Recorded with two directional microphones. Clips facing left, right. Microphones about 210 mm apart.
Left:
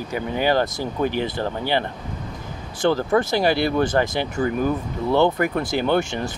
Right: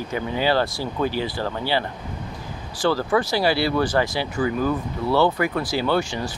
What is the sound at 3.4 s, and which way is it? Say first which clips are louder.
Speech: left 1 dB; 50° left (ahead or behind).